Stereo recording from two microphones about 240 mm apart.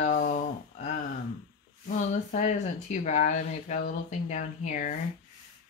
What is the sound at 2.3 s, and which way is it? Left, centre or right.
Speech, left.